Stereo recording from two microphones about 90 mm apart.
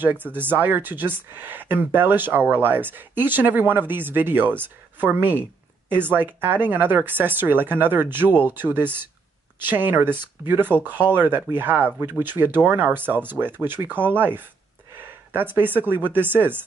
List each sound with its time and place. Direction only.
0.0 s speech: 20° right (ahead or behind)